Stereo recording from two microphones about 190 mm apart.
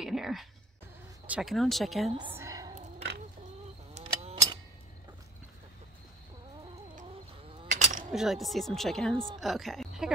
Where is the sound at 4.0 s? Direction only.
30° right (ahead or behind).